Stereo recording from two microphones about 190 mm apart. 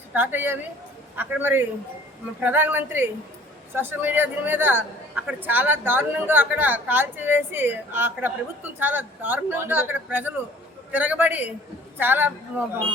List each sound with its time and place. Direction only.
0.1 s a woman's voice: 10° right (ahead or behind)